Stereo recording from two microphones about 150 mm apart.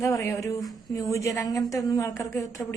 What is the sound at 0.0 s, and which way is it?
A woman's voice, 20° left (ahead or behind).